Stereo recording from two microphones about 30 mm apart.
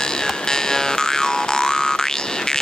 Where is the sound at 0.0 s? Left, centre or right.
Left.